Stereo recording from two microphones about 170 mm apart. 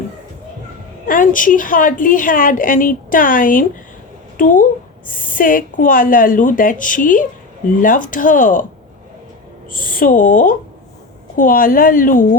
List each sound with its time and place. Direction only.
1.0 s a woman's voice: 55° left (ahead or behind)
9.7 s a woman's voice: 55° left (ahead or behind)